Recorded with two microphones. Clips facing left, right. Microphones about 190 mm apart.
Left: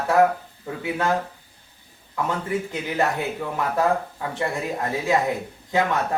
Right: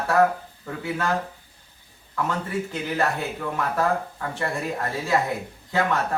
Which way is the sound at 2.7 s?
15° left (ahead or behind).